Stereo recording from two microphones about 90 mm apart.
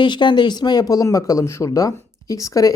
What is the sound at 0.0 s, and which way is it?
Speech, 60° left (ahead or behind).